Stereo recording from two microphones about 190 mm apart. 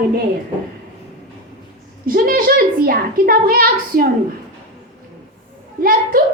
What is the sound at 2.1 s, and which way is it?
A woman's voice, 50° right (ahead or behind).